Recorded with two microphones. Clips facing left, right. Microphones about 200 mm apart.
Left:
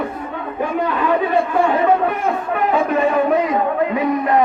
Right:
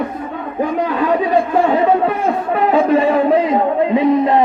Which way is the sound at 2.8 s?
30° right (ahead or behind).